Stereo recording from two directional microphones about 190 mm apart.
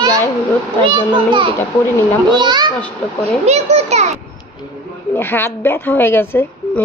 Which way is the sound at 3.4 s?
35° right (ahead or behind).